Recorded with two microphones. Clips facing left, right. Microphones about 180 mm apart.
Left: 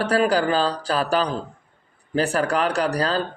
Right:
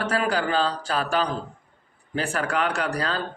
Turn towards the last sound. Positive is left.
turn(degrees=35)  # may be behind; listen again after turning